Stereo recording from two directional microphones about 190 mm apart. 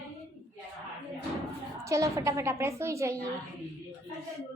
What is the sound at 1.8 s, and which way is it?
A woman's voice, 15° right (ahead or behind).